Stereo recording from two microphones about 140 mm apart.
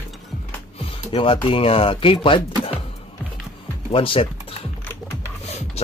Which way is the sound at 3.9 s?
40° left (ahead or behind).